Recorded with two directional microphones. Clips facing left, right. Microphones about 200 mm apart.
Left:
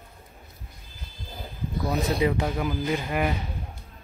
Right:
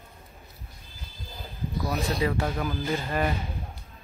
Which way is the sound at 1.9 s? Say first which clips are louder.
Left 4 dB; 20° left (ahead or behind).